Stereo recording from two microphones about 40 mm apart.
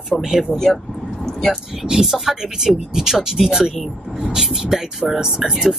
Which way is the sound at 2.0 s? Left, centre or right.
Centre.